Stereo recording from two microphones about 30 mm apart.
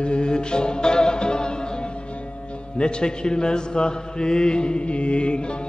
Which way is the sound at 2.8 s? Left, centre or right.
Left.